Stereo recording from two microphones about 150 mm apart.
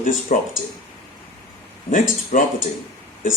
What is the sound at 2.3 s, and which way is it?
Speech, 60° left (ahead or behind).